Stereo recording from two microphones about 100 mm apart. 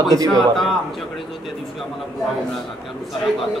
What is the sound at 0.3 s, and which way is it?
Speech, 5° left (ahead or behind).